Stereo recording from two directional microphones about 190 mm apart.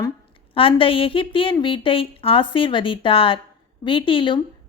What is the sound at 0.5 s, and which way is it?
A woman's voice, 30° left (ahead or behind).